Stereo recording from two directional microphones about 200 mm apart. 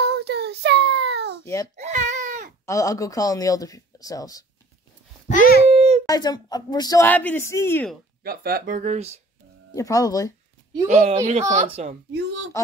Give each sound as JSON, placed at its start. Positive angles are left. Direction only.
{"t": 0.0, "sound": "child singing", "side_deg": -55}
{"t": 1.4, "sound": "a child's voice", "side_deg": 15}
{"t": 1.8, "sound": "baby cry", "side_deg": -35}
{"t": 2.6, "sound": "speech", "side_deg": 15}
{"t": 5.7, "sound": "dog", "side_deg": -30}
{"t": 6.0, "sound": "speech", "side_deg": 20}
{"t": 8.2, "sound": "speech", "side_deg": -50}
{"t": 9.8, "sound": "speech", "side_deg": 15}
{"t": 10.9, "sound": "speech", "side_deg": -35}
{"t": 12.1, "sound": "a woman's voice", "side_deg": -65}